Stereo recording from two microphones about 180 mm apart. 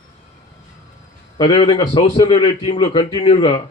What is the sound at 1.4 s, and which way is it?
A man's voice, 25° left (ahead or behind).